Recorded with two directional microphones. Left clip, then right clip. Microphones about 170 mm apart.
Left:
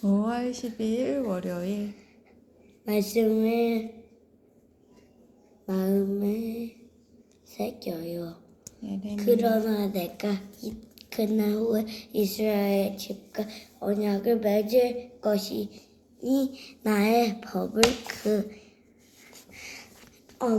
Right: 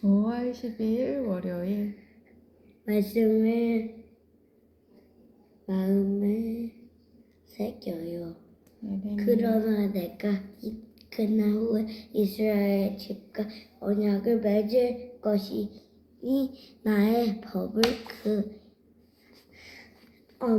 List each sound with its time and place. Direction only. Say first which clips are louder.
0.2 s a woman's voice: left 1 dB; 5° left (ahead or behind)
2.8 s a woman's voice: left 1 dB; 20° left (ahead or behind)
5.6 s a woman's voice: left 1 dB; 25° left (ahead or behind)
19.5 s a sound: left 6 dB; 25° left (ahead or behind)
20.4 s a woman's voice: left 1 dB; 20° left (ahead or behind)